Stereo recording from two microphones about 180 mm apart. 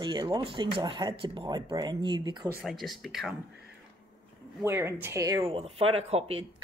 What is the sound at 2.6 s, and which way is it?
Speech, centre (ahead or behind).